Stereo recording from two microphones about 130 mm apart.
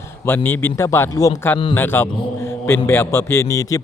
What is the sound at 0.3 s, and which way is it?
A man's voice, 15° left (ahead or behind).